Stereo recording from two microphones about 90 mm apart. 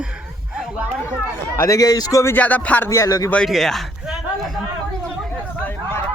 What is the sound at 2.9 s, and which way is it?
Speech, 35° left (ahead or behind).